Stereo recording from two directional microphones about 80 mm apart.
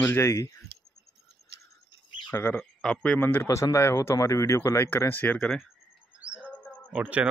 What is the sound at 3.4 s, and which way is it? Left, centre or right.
Speech, left.